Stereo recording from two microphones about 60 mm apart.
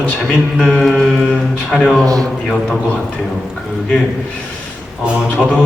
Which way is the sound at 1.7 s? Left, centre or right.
Centre.